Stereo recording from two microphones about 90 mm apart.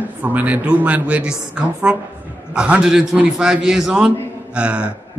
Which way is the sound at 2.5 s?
10° right (ahead or behind).